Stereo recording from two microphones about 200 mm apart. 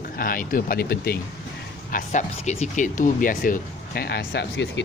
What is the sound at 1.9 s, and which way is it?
Speech, 40° left (ahead or behind).